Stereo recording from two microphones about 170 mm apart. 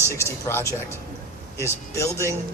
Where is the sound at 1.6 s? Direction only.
15° left (ahead or behind).